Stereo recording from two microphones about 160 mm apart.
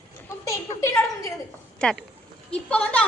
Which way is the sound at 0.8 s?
20° left (ahead or behind).